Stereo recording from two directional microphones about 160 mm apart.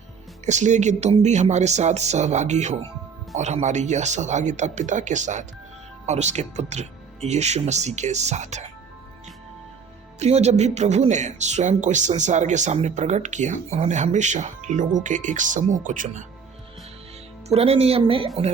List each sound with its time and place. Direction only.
0.4 s speech: 45° right (ahead or behind)
10.2 s speech: 40° right (ahead or behind)
17.5 s a woman's voice: 40° right (ahead or behind)